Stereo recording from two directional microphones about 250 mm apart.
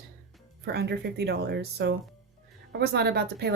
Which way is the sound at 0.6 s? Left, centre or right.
Right.